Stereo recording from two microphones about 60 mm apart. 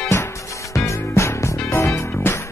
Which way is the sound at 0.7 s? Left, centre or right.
Left.